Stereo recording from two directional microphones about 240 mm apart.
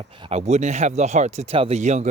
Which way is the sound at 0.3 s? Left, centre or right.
Right.